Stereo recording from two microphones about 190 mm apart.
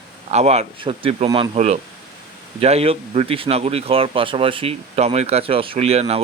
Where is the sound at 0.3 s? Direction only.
35° right (ahead or behind).